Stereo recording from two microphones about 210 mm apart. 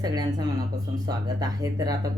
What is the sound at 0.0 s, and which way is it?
Speech, 20° right (ahead or behind).